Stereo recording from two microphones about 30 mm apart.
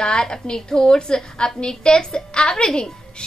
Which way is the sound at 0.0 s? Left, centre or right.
Left.